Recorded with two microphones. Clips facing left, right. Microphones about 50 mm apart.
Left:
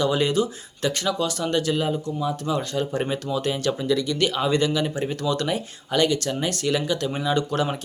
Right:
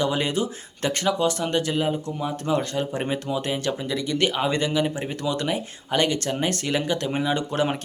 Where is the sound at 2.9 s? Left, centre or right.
Right.